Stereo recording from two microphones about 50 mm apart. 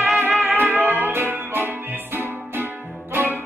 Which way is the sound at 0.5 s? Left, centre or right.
Right.